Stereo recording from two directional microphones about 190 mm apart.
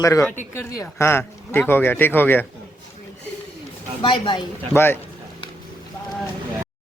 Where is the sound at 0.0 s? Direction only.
15° left (ahead or behind).